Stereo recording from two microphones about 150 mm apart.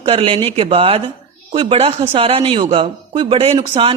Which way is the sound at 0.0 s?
40° right (ahead or behind).